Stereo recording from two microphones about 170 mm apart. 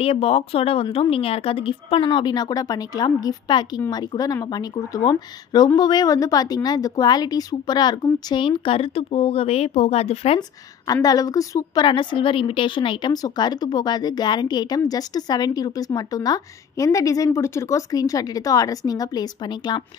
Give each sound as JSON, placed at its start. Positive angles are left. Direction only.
{"t": 0.0, "sound": "a woman's voice", "side_deg": 35}
{"t": 10.9, "sound": "a woman's voice", "side_deg": 20}